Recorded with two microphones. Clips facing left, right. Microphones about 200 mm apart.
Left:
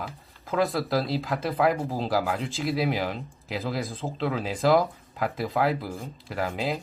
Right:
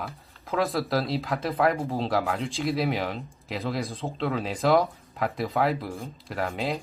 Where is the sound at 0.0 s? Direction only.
Centre (ahead or behind).